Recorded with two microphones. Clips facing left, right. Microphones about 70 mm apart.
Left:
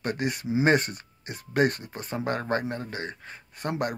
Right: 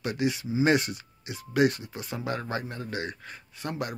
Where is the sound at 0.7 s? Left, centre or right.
Left.